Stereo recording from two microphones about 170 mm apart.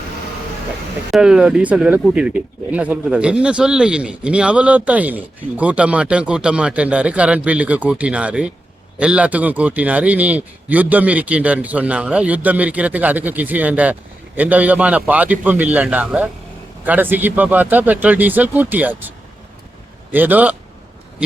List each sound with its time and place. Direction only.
1.1 s speech: 5° right (ahead or behind)